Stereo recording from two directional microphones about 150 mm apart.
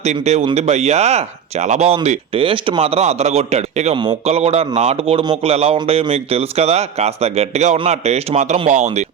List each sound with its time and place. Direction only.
0.0 s speech: 50° right (ahead or behind)
2.0 s speech: 35° right (ahead or behind)